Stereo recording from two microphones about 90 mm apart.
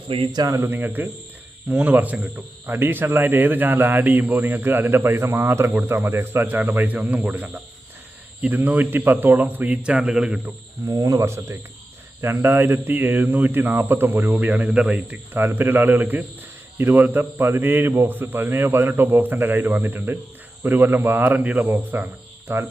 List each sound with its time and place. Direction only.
0.3 s speech: 50° right (ahead or behind)
0.5 s a man's voice: 25° right (ahead or behind); by 10.5 s 10° right (ahead or behind)
10.8 s a man's voice: 40° right (ahead or behind); by 15.2 s 10° right (ahead or behind)
15.3 s a man's voice: 25° right (ahead or behind)